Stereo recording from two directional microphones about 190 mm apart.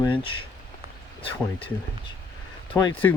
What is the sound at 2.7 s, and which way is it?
Speech, 25° left (ahead or behind).